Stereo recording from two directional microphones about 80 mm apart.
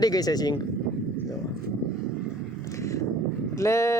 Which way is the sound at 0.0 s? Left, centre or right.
Left.